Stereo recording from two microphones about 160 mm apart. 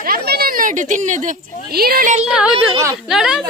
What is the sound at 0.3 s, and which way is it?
Speech, 75° right (ahead or behind).